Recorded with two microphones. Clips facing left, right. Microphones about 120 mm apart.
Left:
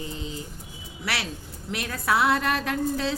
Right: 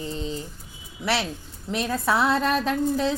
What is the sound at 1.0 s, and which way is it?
Speech, 25° right (ahead or behind).